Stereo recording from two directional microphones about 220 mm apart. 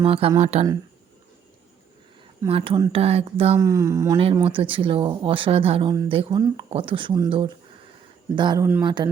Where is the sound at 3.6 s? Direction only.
15° right (ahead or behind).